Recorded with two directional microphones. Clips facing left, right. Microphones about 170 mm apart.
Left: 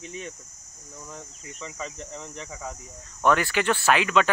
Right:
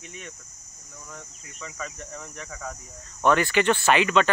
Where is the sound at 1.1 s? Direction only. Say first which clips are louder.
Left 3 dB; 25° left (ahead or behind).